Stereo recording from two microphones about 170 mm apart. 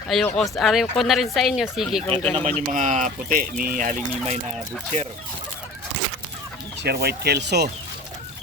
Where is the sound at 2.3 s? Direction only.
45° right (ahead or behind).